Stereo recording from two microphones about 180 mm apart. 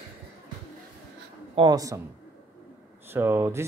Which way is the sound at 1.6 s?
20° right (ahead or behind).